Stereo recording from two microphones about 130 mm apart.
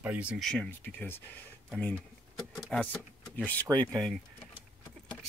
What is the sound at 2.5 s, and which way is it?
Speech, 5° left (ahead or behind).